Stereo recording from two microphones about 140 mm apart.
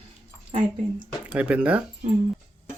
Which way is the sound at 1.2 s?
10° right (ahead or behind).